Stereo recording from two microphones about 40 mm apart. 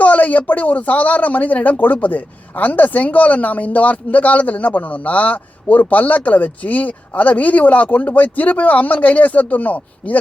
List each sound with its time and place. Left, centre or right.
0.0 s speech: left